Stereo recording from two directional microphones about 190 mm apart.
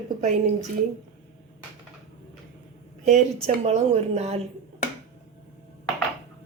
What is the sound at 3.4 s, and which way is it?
Speech, 35° right (ahead or behind).